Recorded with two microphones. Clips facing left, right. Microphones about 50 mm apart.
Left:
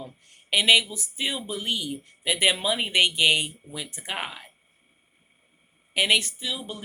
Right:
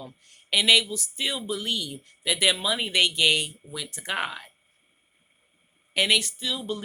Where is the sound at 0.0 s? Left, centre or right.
Left.